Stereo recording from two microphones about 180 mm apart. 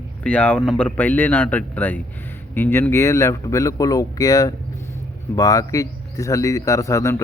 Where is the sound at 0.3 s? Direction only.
5° left (ahead or behind).